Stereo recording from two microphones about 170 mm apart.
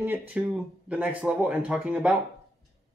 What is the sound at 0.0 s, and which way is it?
Speech, 10° right (ahead or behind).